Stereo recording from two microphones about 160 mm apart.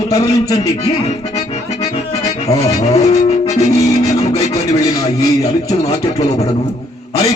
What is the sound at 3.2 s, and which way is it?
Music, 40° left (ahead or behind).